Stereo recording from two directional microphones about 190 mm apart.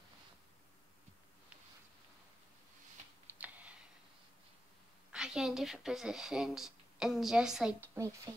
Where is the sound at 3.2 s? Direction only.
10° right (ahead or behind).